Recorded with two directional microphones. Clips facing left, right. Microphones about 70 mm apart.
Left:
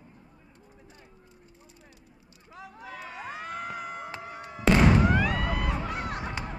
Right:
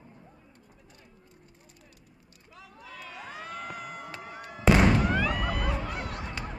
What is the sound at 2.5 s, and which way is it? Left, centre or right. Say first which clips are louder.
Crowd: left 5 dB; left.